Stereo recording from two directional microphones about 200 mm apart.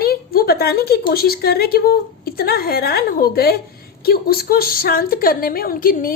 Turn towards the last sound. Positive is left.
turn(degrees=45)  # may be behind; listen again after turning